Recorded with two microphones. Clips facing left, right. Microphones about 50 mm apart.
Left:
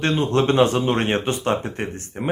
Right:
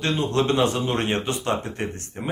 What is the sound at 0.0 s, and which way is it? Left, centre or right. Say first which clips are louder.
Speech: left 3 dB; left.